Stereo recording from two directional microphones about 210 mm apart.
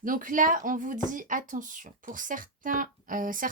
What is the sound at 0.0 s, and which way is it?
Speech, 40° right (ahead or behind).